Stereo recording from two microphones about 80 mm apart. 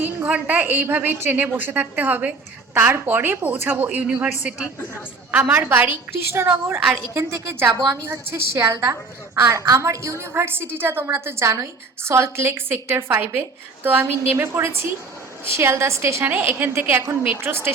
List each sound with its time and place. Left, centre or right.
0.3 s a woman's voice: centre
5.4 s a woman's voice: right